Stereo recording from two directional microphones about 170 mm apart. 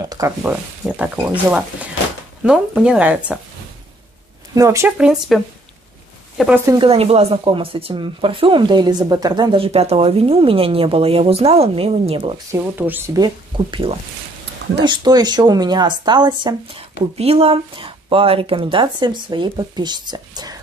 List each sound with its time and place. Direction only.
0.1 s speech: 20° right (ahead or behind)
0.8 s speech: 5° right (ahead or behind)
2.4 s speech: 5° right (ahead or behind)
4.6 s speech: 15° right (ahead or behind)
4.9 s speech: centre (ahead or behind)
6.6 s speech: 25° right (ahead or behind)
6.9 s speech: 35° right (ahead or behind)
12.4 s speech: 10° right (ahead or behind)
13.1 s speech: 25° right (ahead or behind)